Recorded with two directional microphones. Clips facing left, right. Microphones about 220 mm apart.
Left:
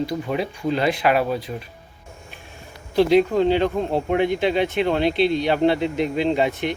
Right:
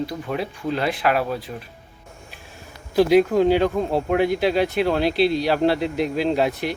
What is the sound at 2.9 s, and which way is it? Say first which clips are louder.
Speech: right 1 dB; 10° right (ahead or behind).